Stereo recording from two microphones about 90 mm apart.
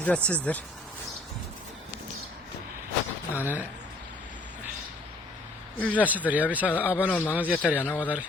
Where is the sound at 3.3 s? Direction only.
20° right (ahead or behind).